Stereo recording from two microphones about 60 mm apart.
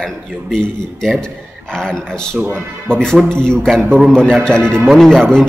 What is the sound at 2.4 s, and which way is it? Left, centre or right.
Speech, right.